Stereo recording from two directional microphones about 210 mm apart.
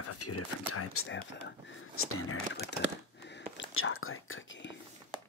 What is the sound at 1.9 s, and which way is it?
Speech, 90° left.